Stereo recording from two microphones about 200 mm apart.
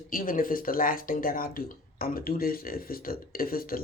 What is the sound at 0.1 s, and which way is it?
Speech, 45° left (ahead or behind).